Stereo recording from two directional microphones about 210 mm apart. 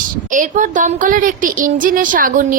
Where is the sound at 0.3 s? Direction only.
40° right (ahead or behind).